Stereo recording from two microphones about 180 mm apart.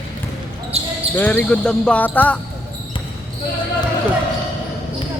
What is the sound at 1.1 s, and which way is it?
Speech, 10° left (ahead or behind).